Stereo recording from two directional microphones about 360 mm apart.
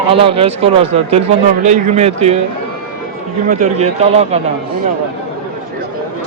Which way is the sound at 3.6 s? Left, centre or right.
Centre.